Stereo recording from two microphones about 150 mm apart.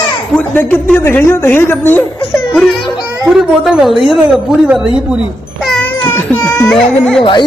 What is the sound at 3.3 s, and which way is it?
Speech, 5° right (ahead or behind).